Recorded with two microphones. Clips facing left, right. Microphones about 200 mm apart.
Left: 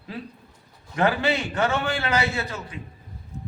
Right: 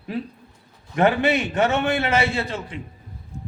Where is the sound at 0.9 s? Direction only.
25° right (ahead or behind).